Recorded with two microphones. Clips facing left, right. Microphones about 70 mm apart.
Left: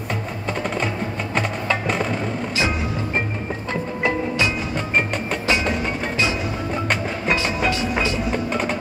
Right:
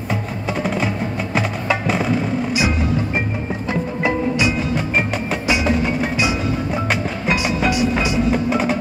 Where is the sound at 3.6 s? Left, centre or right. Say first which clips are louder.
Right 2 dB; centre.